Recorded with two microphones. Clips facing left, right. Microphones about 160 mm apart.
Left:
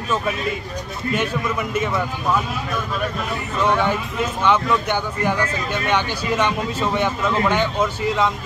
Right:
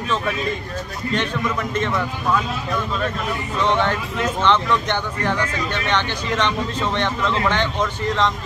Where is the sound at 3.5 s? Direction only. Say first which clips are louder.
Left 1 dB; 10° left (ahead or behind).